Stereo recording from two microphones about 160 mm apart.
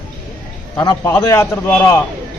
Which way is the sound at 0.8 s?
25° left (ahead or behind).